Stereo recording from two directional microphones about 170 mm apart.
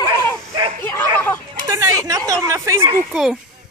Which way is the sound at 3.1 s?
Centre (ahead or behind).